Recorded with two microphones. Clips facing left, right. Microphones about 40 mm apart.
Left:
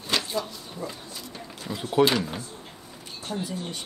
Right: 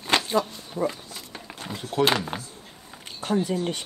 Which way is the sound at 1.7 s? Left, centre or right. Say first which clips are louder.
Left 3 dB; centre.